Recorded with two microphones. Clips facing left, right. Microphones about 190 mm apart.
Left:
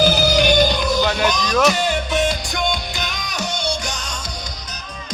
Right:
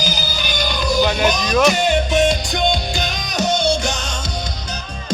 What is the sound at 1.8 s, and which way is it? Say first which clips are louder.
Music: right 4 dB; 20° right (ahead or behind).